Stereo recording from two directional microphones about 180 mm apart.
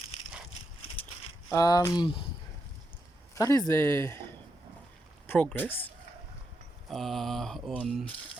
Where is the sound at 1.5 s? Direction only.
20° left (ahead or behind).